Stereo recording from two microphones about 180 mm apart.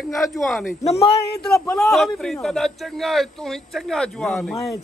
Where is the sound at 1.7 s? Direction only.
Centre (ahead or behind).